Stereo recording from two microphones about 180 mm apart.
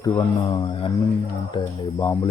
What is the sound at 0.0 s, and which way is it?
Speech, 20° left (ahead or behind).